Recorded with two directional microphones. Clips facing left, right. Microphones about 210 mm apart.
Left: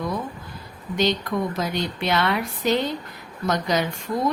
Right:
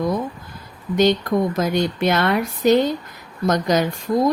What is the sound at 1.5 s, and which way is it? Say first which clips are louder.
A woman's voice: right 6 dB; 50° right (ahead or behind).